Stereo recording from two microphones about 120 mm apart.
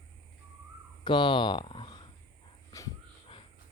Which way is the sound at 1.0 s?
40° left (ahead or behind).